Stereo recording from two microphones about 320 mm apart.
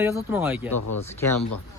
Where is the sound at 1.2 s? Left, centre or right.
Centre.